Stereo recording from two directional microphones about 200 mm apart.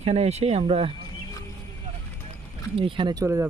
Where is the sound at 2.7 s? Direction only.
25° right (ahead or behind).